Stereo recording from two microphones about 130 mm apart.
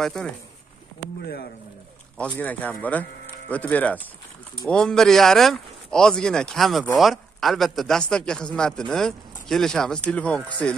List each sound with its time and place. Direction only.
0.0 s a man's voice: 5° left (ahead or behind)
2.1 s a man's voice: 10° left (ahead or behind)